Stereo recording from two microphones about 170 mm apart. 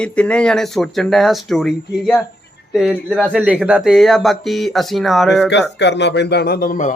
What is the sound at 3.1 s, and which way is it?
Speech, 5° right (ahead or behind).